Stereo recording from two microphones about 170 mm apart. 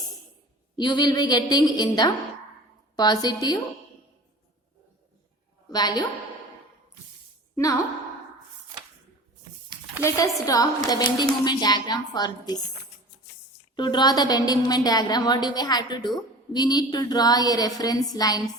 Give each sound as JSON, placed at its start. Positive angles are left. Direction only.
{"t": 0.8, "sound": "a woman's voice", "side_deg": 25}
{"t": 5.7, "sound": "a woman's voice", "side_deg": 25}
{"t": 7.5, "sound": "a woman's voice", "side_deg": 20}
{"t": 10.0, "sound": "a woman's voice", "side_deg": 20}
{"t": 13.7, "sound": "a woman's voice", "side_deg": 25}